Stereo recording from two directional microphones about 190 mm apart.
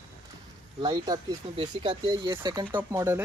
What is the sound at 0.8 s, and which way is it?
Speech, 20° right (ahead or behind).